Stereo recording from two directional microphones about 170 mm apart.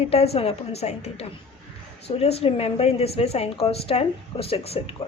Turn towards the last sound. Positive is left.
turn(degrees=35)  # may be behind; listen again after turning